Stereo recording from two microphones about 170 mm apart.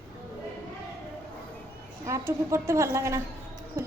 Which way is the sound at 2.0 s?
20° right (ahead or behind).